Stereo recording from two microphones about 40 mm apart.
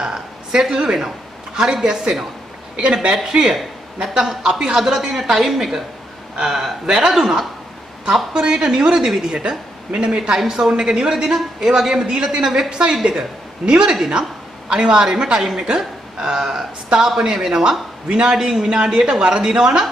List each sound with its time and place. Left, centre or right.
0.0 s a woman's voice: centre
8.3 s a man's voice: right